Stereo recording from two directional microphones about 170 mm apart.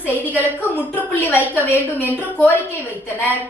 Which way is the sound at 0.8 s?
10° left (ahead or behind).